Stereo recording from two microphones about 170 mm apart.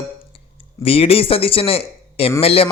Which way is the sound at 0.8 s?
35° left (ahead or behind).